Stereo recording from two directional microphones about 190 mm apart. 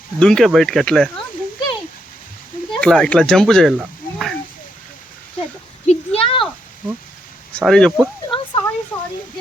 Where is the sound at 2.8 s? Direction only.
5° left (ahead or behind).